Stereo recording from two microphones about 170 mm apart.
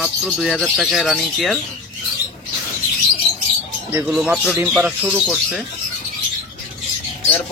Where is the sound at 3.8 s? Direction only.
10° right (ahead or behind).